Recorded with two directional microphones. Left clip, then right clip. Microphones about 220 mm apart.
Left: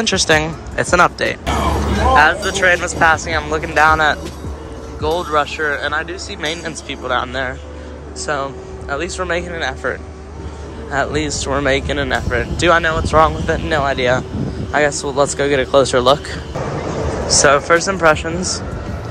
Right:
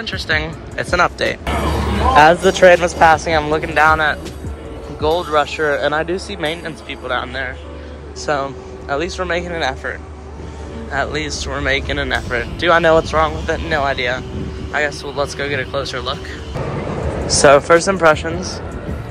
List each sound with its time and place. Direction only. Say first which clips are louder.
0.1 s speech: left 4 dB; 20° left (ahead or behind)
0.8 s speech: left 2 dB; 5° left (ahead or behind)
6.4 s speech: even; 10° left (ahead or behind)
8.3 s speech: right 2 dB; 5° left (ahead or behind)
12.7 s speech: right 7 dB; 5° right (ahead or behind)
13.1 s speech: left 4 dB; 10° left (ahead or behind)
17.4 s speech: right 3 dB; centre (ahead or behind)